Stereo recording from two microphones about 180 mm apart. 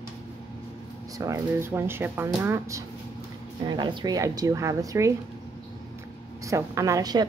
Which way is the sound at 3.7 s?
25° right (ahead or behind).